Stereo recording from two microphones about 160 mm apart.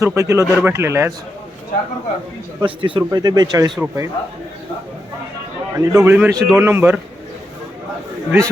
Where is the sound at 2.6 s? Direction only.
30° right (ahead or behind).